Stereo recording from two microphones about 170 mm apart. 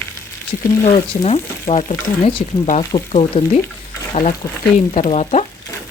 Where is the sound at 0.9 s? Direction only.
40° left (ahead or behind).